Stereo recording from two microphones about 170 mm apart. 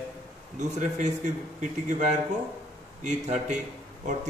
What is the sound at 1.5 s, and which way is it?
A man's voice, 45° right (ahead or behind).